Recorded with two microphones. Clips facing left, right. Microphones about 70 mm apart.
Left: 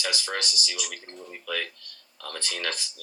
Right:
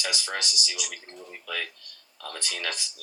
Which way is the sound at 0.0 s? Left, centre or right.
Centre.